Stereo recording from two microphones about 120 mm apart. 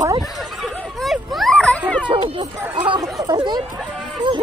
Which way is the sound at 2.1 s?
40° right (ahead or behind).